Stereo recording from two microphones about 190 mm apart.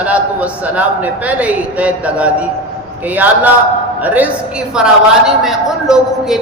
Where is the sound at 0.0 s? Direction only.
5° right (ahead or behind).